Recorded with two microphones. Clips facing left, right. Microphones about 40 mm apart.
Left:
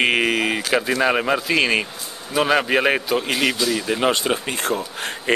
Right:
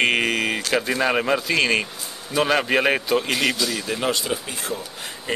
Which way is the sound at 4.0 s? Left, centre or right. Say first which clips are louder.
Left 4 dB; left.